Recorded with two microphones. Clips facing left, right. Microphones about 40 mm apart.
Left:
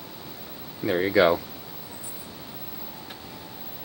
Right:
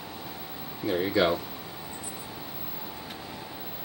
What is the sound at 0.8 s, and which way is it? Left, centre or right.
Speech, centre.